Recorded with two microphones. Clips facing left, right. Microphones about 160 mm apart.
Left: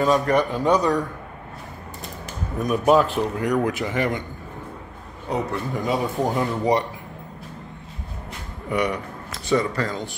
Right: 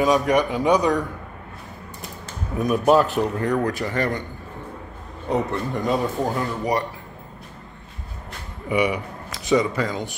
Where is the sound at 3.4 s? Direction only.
15° left (ahead or behind).